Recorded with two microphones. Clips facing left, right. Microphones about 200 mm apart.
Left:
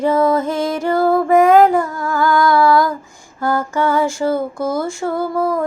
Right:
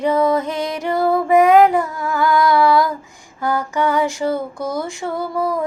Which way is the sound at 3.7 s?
20° right (ahead or behind).